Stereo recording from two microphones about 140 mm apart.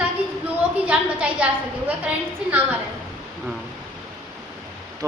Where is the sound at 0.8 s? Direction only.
10° right (ahead or behind).